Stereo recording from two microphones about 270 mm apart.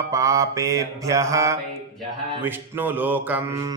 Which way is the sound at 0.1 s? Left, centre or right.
Centre.